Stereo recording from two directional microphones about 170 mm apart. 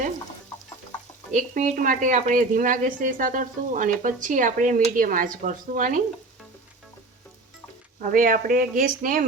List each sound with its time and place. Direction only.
1.3 s speech: 45° right (ahead or behind)
8.0 s speech: 55° right (ahead or behind)